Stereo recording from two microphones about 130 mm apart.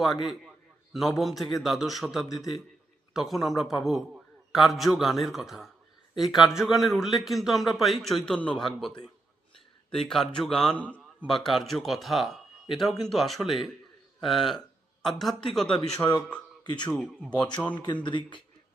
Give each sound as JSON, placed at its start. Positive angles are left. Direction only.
{"t": 0.0, "sound": "a man's voice", "side_deg": 0}
{"t": 16.0, "sound": "speech", "side_deg": 20}
{"t": 16.6, "sound": "speech", "side_deg": 35}
{"t": 18.0, "sound": "speech", "side_deg": 35}